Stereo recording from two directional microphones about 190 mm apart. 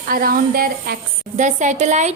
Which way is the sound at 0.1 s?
50° right (ahead or behind).